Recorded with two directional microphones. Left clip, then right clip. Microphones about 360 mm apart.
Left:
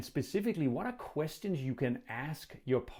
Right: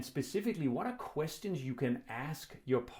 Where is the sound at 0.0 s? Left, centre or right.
Left.